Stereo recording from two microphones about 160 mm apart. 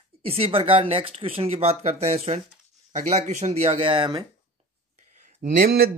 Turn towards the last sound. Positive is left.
turn(degrees=-70)  # may be behind; listen again after turning